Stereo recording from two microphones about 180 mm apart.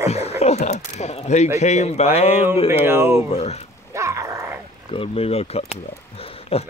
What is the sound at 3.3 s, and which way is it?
Speech, 35° left (ahead or behind).